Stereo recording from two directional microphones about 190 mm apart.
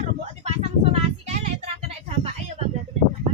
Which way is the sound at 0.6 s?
35° right (ahead or behind).